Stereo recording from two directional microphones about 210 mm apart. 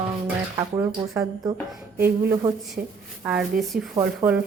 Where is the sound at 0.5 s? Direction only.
15° right (ahead or behind).